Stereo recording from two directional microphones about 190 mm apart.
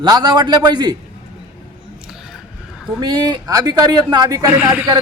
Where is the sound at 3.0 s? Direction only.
20° right (ahead or behind).